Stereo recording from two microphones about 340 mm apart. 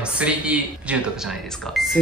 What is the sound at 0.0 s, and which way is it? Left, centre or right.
Speech, centre.